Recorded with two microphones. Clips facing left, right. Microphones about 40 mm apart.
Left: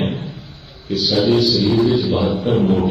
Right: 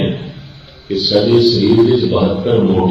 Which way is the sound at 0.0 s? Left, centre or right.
Right.